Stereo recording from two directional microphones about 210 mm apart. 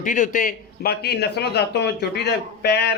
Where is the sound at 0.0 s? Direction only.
40° left (ahead or behind).